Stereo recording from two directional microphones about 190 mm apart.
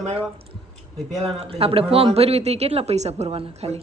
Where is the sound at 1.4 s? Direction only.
30° right (ahead or behind).